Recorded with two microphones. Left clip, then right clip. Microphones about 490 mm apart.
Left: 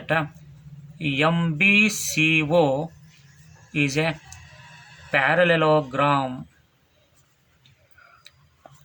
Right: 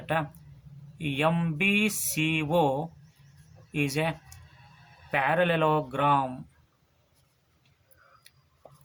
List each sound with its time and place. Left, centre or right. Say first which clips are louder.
0.0 s speech: left 5 dB; right
5.1 s speech: left 6 dB; right